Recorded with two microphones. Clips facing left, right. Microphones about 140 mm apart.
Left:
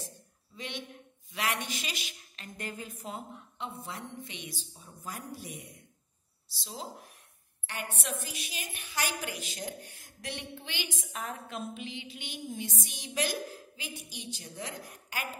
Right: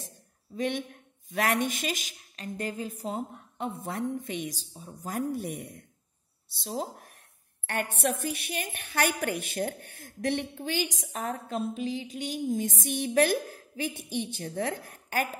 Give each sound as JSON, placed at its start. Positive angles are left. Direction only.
{"t": 0.6, "sound": "a woman's voice", "side_deg": -50}